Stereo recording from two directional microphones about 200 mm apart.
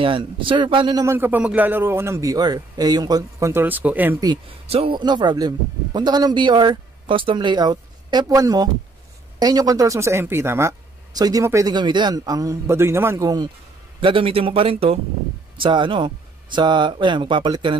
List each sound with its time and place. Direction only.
0.0 s a man's voice: 25° right (ahead or behind); by 4.3 s 10° right (ahead or behind)
4.3 s a man's voice: 30° right (ahead or behind)